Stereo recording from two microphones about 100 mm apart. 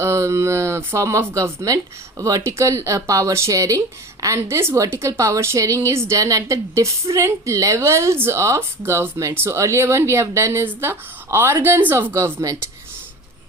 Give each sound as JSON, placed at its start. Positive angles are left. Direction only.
{"t": 0.0, "sound": "a woman's voice", "side_deg": -30}